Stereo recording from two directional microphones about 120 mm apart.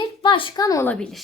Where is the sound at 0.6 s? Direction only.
30° left (ahead or behind).